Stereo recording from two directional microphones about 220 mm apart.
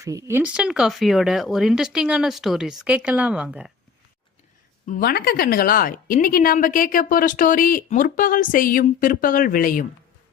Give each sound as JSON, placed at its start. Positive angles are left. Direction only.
{"t": 0.0, "sound": "speech", "side_deg": -15}
{"t": 4.9, "sound": "a woman's voice", "side_deg": 40}